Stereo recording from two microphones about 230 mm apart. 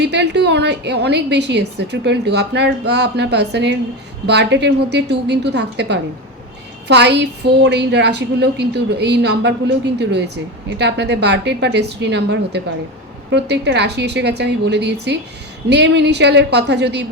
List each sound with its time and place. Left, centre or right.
0.0 s a woman's voice: right